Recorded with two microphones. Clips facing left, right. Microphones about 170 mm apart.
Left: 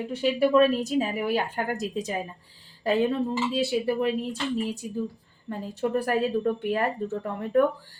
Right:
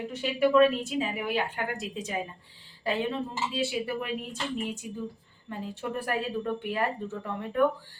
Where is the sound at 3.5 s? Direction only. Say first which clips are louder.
Left 4 dB; 35° left (ahead or behind).